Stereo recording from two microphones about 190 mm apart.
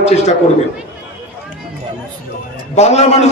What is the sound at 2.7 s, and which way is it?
Speech, 35° left (ahead or behind).